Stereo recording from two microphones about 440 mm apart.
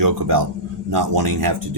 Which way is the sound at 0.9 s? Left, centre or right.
Right.